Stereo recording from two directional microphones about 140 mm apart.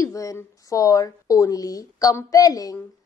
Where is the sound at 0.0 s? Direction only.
25° left (ahead or behind).